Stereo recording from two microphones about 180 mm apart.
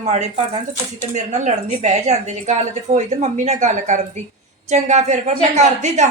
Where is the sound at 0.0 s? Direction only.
40° right (ahead or behind).